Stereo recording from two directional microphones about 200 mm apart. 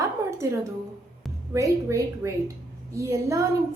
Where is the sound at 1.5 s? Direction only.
15° right (ahead or behind).